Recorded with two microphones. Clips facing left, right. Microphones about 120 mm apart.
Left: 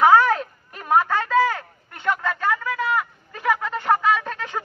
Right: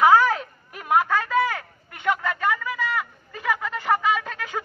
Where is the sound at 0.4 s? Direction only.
30° left (ahead or behind).